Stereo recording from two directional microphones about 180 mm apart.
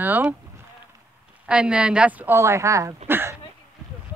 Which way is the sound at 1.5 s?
5° right (ahead or behind).